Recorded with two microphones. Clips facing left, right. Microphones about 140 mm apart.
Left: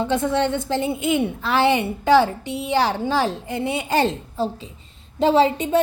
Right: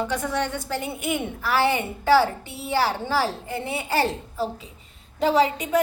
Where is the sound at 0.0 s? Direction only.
25° left (ahead or behind).